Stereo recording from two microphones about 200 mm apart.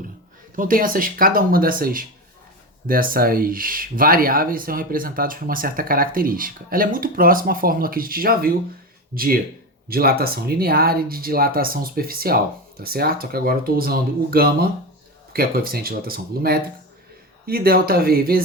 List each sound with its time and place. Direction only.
0.5 s speech: 45° right (ahead or behind)